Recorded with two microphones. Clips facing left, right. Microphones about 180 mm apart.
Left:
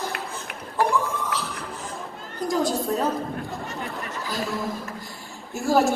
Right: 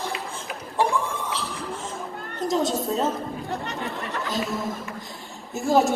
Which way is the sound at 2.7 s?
Centre (ahead or behind).